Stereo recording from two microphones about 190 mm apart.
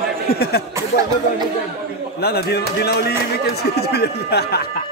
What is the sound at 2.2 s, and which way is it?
Speech, 55° left (ahead or behind).